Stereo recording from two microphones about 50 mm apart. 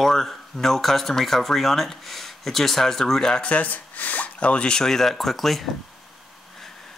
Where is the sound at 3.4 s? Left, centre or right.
Left; by 5.7 s centre.